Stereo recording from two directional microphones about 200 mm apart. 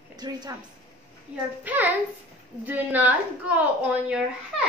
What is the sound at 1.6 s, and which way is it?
A woman's voice, 10° right (ahead or behind).